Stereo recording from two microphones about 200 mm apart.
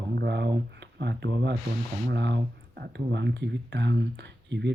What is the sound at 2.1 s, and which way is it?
Speech, 60° right (ahead or behind).